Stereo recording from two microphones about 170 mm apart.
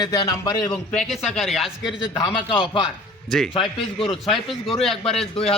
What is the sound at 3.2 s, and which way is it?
Speech, centre (ahead or behind).